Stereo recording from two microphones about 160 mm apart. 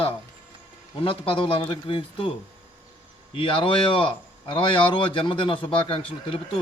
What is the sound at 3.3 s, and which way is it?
A man's voice, 35° left (ahead or behind).